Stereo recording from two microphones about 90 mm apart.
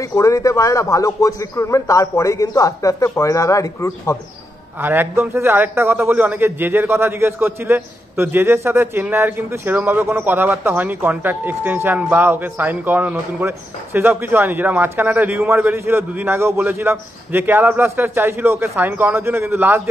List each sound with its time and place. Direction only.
0.0 s a man's voice: 35° left (ahead or behind)
4.7 s speech: 25° right (ahead or behind)